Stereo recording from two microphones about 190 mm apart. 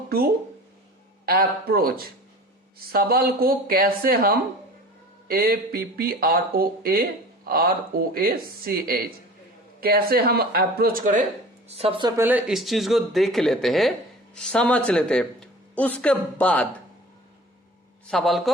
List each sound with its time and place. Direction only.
1.2 s speech: 50° right (ahead or behind)
11.7 s speech: 30° right (ahead or behind)
12.2 s speech: 5° right (ahead or behind)
18.1 s speech: centre (ahead or behind)